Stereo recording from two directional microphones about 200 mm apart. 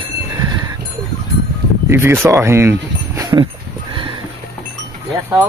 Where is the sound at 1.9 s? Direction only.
10° right (ahead or behind).